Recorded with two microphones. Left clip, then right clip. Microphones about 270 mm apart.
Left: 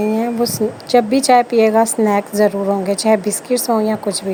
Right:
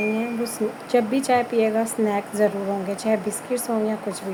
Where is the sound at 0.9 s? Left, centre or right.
Left.